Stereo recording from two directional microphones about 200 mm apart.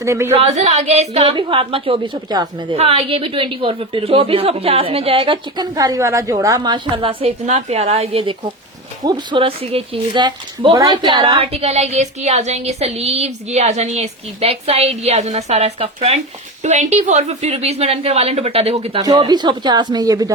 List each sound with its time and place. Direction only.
0.0 s speech: 15° right (ahead or behind)
0.3 s a woman's voice: 35° right (ahead or behind)
11.5 s a woman's voice: 30° right (ahead or behind)